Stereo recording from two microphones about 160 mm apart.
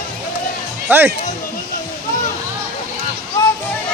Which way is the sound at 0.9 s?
15° right (ahead or behind).